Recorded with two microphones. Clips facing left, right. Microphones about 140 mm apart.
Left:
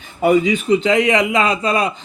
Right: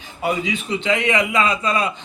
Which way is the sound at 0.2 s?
50° left (ahead or behind).